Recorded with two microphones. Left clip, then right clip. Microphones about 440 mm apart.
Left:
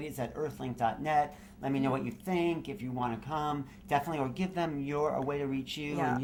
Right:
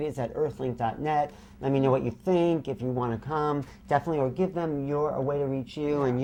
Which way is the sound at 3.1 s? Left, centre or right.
Right.